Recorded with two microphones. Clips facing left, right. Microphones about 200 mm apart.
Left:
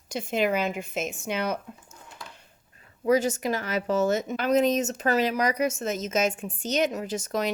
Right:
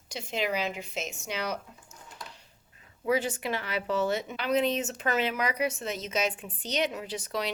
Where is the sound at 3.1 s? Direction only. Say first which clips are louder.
Left 5 dB; 45° left (ahead or behind).